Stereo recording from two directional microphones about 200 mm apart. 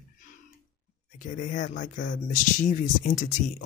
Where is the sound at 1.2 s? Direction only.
40° left (ahead or behind).